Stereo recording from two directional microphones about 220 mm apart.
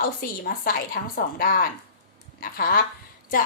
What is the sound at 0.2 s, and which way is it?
A woman's voice, 40° left (ahead or behind).